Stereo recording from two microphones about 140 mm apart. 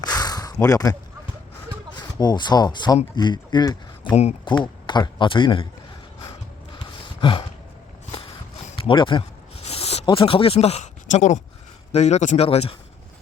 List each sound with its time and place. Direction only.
0.0 s a sound: 25° left (ahead or behind)
2.0 s speech: 30° left (ahead or behind)
4.1 s a man's voice: 50° left (ahead or behind)
4.4 s speech: 35° left (ahead or behind)
7.2 s a sound: 35° left (ahead or behind)
8.7 s speech: 40° left (ahead or behind)
9.6 s a sound: 45° left (ahead or behind)
11.9 s a man's voice: 50° left (ahead or behind)
12.5 s a man's voice: 45° left (ahead or behind)